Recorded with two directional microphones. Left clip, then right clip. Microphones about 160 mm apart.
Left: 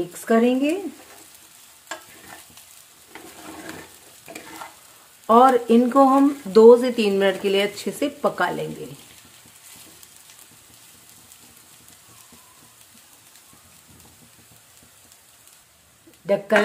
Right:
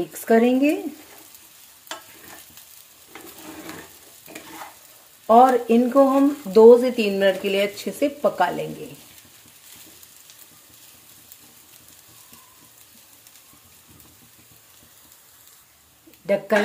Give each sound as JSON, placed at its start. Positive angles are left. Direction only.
{"t": 0.1, "sound": "speech", "side_deg": -10}
{"t": 5.2, "sound": "speech", "side_deg": 15}
{"t": 16.3, "sound": "speech", "side_deg": -5}